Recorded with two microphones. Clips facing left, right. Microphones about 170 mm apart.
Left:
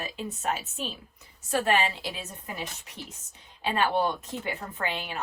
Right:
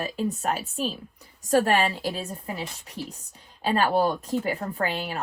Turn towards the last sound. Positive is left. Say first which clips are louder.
# right 5 dB
turn(degrees=-40)  # may be behind; listen again after turning